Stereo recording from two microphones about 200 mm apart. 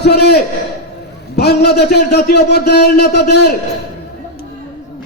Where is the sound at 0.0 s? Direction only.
55° left (ahead or behind).